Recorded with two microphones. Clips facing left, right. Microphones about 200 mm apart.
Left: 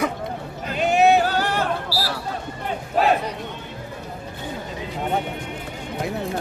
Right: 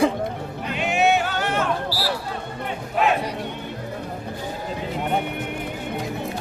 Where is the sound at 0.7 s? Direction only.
35° left (ahead or behind).